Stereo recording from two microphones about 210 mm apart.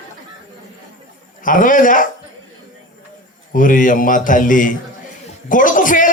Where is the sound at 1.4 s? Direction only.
40° left (ahead or behind).